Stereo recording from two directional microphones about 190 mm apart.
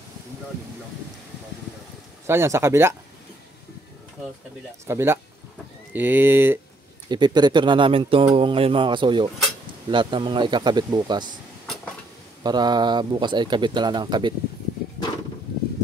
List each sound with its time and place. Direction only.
2.2 s speech: 15° right (ahead or behind)
4.8 s speech: 15° right (ahead or behind)
7.1 s speech: 25° right (ahead or behind)
11.6 s vehicle: 5° left (ahead or behind)
12.4 s speech: 20° right (ahead or behind)